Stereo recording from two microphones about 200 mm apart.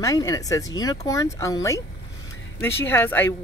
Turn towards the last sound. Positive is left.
turn(degrees=10)  # may be behind; listen again after turning